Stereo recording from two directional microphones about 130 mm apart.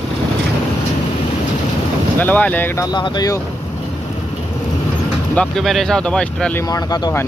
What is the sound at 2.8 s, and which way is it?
Speech, 35° left (ahead or behind).